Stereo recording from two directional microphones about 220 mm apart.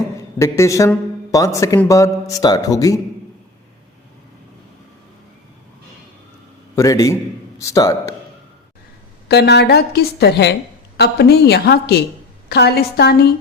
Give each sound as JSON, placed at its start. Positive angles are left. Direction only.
{"t": 0.3, "sound": "a man's voice", "side_deg": 15}
{"t": 6.7, "sound": "a man's voice", "side_deg": 15}
{"t": 9.3, "sound": "a woman's voice", "side_deg": 50}